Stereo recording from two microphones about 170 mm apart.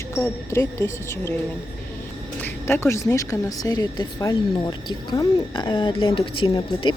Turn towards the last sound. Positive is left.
turn(degrees=30)  # may be behind; listen again after turning